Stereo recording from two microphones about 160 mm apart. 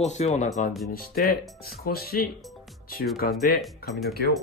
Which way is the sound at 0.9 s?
70° left (ahead or behind).